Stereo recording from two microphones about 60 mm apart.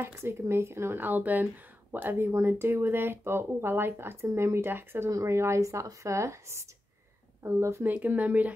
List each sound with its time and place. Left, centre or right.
0.0 s speech: right
1.0 s speech: right
5.1 s speech: right
7.8 s speech: right